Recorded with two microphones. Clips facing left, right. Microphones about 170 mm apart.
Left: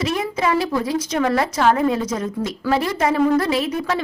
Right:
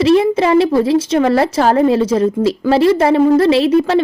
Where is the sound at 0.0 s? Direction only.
30° right (ahead or behind).